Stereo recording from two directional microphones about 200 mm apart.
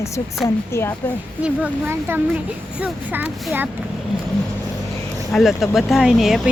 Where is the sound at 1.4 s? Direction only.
10° right (ahead or behind).